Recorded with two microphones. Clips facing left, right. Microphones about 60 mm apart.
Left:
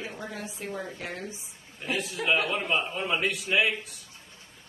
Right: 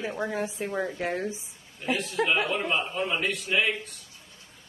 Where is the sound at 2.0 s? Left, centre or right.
Centre.